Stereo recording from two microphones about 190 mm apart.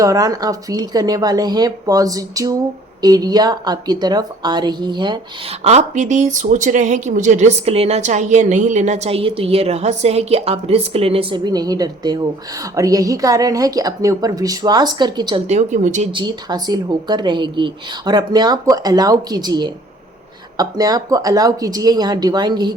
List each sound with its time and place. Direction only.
0.0 s speech: 20° right (ahead or behind)
5.6 s speech: 40° right (ahead or behind); by 15.4 s 20° right (ahead or behind)
15.4 s speech: 40° right (ahead or behind)
16.1 s speech: 20° right (ahead or behind)